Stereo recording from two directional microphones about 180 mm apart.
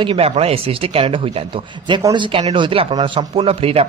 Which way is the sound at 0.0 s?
30° right (ahead or behind).